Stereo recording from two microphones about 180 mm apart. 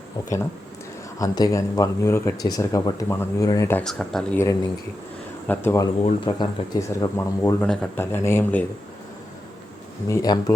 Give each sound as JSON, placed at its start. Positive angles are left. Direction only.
{"t": 0.2, "sound": "speech", "side_deg": 20}
{"t": 3.8, "sound": "speech", "side_deg": 5}
{"t": 5.5, "sound": "speech", "side_deg": 15}
{"t": 6.0, "sound": "speech", "side_deg": 30}
{"t": 10.1, "sound": "speech", "side_deg": 20}